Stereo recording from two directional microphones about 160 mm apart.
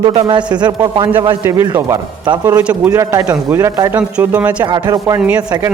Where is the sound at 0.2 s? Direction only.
30° right (ahead or behind).